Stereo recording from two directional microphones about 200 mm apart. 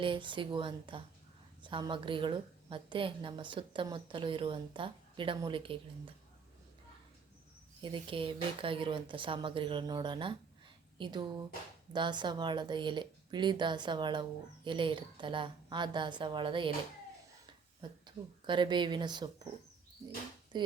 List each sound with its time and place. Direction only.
0.0 s a woman's voice: 25° right (ahead or behind)
7.8 s a woman's voice: 25° right (ahead or behind)
18.0 s a woman's voice: 25° right (ahead or behind)